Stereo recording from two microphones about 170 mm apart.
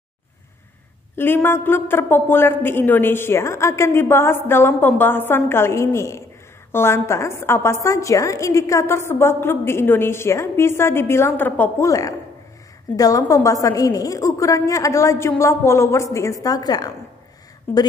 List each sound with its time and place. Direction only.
1.1 s a woman's voice: 15° left (ahead or behind)
17.7 s a woman's voice: 10° left (ahead or behind)